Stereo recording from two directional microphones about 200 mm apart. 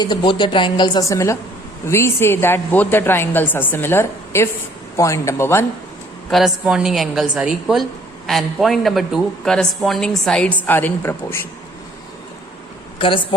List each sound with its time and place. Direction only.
0.0 s a woman's voice: 20° left (ahead or behind)
6.3 s a woman's voice: centre (ahead or behind)
13.0 s a woman's voice: 25° left (ahead or behind)